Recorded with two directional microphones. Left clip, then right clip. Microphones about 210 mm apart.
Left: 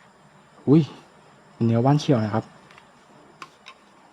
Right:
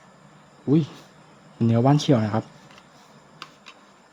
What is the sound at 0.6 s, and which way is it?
Speech, 20° left (ahead or behind).